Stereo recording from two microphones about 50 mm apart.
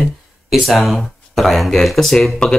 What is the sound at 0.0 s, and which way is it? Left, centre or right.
Speech, centre.